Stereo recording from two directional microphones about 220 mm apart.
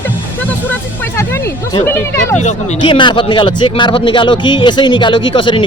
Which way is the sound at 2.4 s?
30° left (ahead or behind).